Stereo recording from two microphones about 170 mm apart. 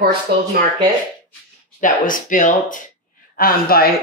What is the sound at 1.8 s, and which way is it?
Speech, 50° left (ahead or behind).